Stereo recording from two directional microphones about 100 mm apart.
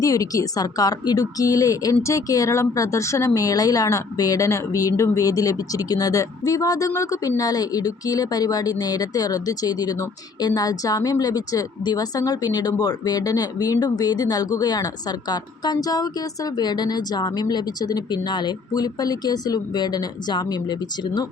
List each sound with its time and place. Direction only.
0.0 s a woman's voice: 35° left (ahead or behind)